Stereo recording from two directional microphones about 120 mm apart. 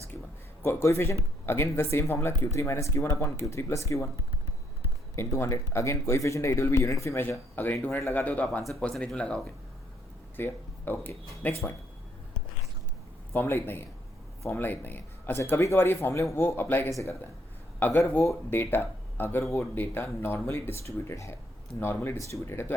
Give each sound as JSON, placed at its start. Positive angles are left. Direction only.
{"t": 0.6, "sound": "speech", "side_deg": 20}
{"t": 5.1, "sound": "speech", "side_deg": 20}
{"t": 13.3, "sound": "speech", "side_deg": 20}